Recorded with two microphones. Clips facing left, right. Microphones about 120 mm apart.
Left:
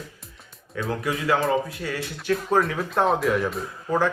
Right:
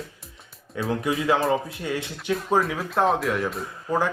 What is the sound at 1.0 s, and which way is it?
Speech, 25° right (ahead or behind).